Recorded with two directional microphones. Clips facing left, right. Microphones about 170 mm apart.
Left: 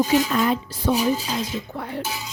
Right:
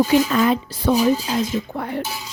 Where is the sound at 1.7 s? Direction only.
60° right (ahead or behind).